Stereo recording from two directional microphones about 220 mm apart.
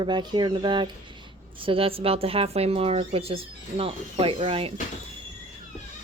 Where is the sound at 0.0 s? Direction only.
20° right (ahead or behind).